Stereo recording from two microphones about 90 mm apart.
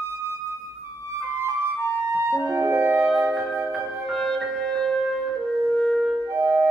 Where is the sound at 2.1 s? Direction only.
25° right (ahead or behind).